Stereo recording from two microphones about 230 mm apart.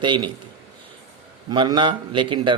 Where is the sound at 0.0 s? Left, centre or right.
Right.